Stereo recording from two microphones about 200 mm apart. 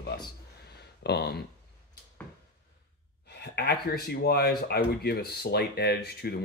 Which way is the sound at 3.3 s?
55° left (ahead or behind).